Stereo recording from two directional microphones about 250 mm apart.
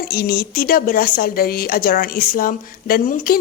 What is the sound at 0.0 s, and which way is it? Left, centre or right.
A woman's voice, left.